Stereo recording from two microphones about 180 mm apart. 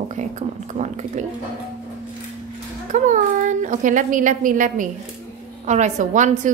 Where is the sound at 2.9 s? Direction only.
45° right (ahead or behind).